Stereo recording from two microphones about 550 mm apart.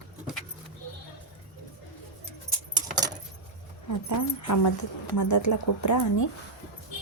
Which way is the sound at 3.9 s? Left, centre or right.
Left.